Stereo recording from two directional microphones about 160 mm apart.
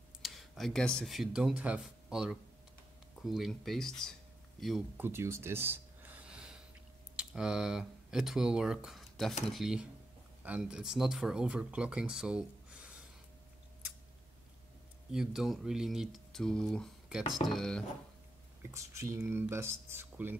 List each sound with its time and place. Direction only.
0.2 s speech: centre (ahead or behind)
4.9 s a sound: 15° right (ahead or behind)
7.2 s speech: 5° right (ahead or behind)
15.0 s speech: 5° right (ahead or behind)
18.7 s speech: 20° right (ahead or behind)